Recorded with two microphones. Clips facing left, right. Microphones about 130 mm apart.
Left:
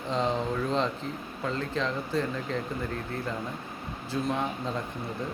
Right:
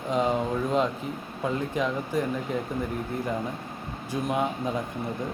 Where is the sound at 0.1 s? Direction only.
10° right (ahead or behind).